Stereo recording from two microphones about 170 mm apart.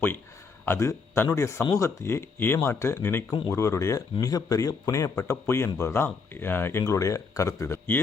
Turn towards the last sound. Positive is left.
turn(degrees=15)  # may be behind; listen again after turning